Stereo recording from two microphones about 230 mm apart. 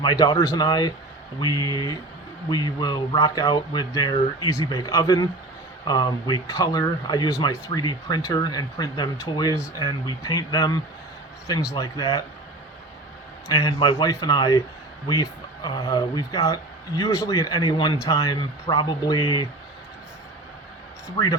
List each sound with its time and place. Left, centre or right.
0.0 s speech: centre
13.5 s speech: centre